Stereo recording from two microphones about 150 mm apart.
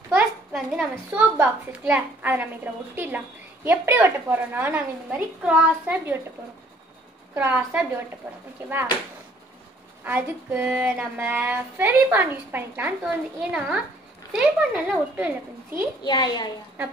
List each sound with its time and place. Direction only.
0.1 s a sound: 5° right (ahead or behind)
1.1 s child singing: 10° right (ahead or behind)
7.3 s child singing: 10° right (ahead or behind)
10.0 s child singing: 15° right (ahead or behind)
16.0 s a woman's voice: 30° left (ahead or behind)